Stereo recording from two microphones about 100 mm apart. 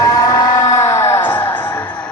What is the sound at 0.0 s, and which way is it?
Music, 35° left (ahead or behind).